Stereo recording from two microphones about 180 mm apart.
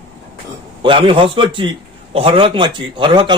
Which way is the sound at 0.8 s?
30° right (ahead or behind).